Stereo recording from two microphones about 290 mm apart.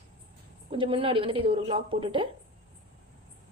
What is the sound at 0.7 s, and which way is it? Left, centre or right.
A woman's voice, centre.